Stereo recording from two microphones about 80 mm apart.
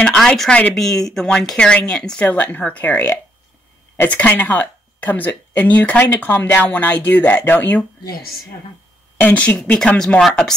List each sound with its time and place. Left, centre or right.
0.1 s speech: centre
0.7 s speech: centre; by 7.8 s left
9.2 s speech: left
9.8 s speech: centre